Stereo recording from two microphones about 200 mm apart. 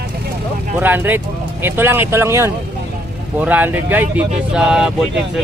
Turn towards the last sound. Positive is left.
turn(degrees=-5)  # may be behind; listen again after turning